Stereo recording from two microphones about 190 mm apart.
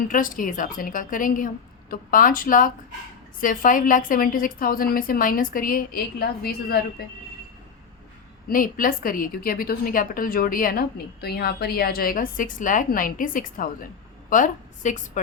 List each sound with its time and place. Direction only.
0.1 s a woman's voice: 45° left (ahead or behind)
8.4 s a woman's voice: 45° left (ahead or behind)